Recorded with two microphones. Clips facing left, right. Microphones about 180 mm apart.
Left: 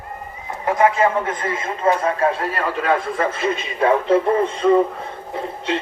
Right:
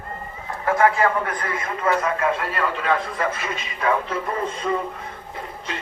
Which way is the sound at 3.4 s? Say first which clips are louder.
Left 6 dB; 30° left (ahead or behind).